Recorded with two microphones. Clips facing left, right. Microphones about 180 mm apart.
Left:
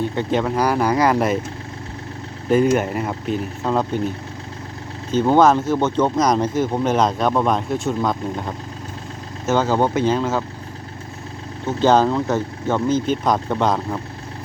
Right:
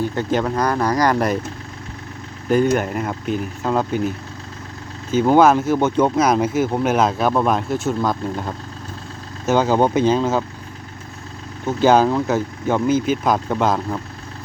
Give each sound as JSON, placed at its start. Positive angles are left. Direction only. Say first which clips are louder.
{"t": 0.0, "sound": "speech", "louder": "even", "side_deg": 0}
{"t": 2.5, "sound": "speech", "louder": "left 1 dB", "side_deg": 5}
{"t": 5.1, "sound": "speech", "louder": "right 1 dB", "side_deg": -10}
{"t": 9.5, "sound": "speech", "louder": "right 2 dB", "side_deg": -15}
{"t": 11.6, "sound": "speech", "louder": "right 1 dB", "side_deg": -10}